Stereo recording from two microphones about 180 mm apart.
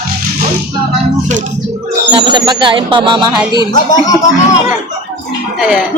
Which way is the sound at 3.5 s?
25° left (ahead or behind).